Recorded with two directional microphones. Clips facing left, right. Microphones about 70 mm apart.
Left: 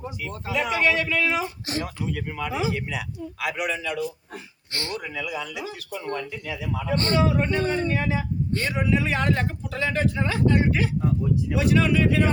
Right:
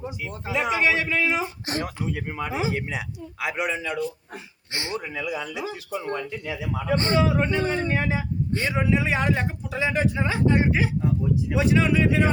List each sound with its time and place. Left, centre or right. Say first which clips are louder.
0.4 s speech: even; right
5.1 s speech: right 1 dB; right